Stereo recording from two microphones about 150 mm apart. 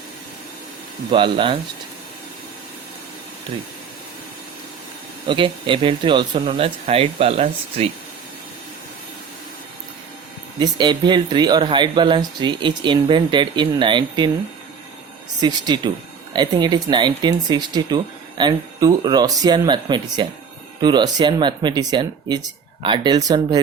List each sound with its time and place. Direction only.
1.1 s speech: 35° right (ahead or behind)
5.3 s speech: 35° right (ahead or behind)
10.6 s speech: 30° right (ahead or behind)
15.4 s speech: 30° right (ahead or behind)